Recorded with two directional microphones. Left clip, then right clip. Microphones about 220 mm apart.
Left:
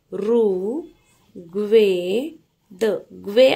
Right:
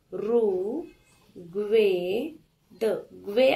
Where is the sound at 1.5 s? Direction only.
50° left (ahead or behind).